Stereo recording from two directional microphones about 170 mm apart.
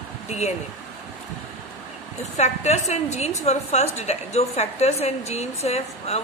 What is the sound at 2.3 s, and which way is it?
Speech, 40° left (ahead or behind).